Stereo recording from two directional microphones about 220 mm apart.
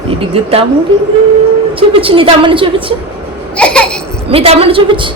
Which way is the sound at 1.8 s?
25° right (ahead or behind).